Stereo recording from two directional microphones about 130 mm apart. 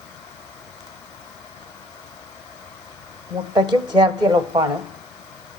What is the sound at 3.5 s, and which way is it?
Speech, 35° right (ahead or behind).